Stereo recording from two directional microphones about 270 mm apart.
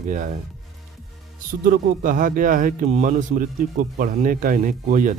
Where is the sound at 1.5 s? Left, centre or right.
Right.